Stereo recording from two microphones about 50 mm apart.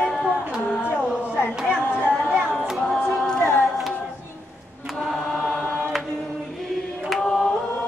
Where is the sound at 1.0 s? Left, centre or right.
Centre.